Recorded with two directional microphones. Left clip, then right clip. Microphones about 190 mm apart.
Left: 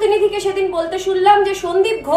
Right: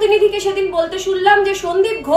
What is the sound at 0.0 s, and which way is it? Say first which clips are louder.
A woman's voice: right 2 dB; 20° left (ahead or behind).